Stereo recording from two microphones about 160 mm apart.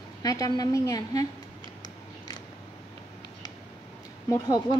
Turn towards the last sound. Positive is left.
turn(degrees=25)  # may be behind; listen again after turning